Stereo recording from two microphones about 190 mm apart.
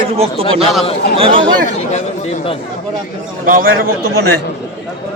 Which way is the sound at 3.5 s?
50° right (ahead or behind).